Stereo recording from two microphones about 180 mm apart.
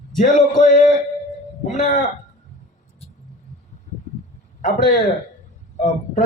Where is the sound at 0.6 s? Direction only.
45° left (ahead or behind).